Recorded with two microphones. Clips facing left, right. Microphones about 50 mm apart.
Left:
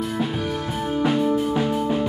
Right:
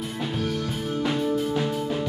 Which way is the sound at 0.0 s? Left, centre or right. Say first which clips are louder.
Left 4 dB; centre.